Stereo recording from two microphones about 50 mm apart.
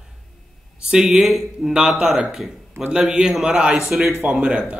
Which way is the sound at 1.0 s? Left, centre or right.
Centre.